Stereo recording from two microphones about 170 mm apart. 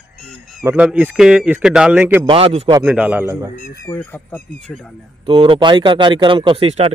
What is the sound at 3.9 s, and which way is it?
Speech, 10° left (ahead or behind).